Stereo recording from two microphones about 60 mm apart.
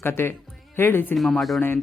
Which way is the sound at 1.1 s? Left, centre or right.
Centre.